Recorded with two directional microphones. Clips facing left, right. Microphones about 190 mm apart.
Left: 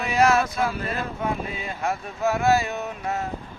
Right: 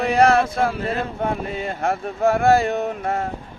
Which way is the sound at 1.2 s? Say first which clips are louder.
Right 4 dB; 55° right (ahead or behind).